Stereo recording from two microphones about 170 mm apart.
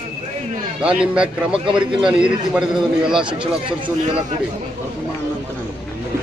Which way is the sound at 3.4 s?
30° right (ahead or behind).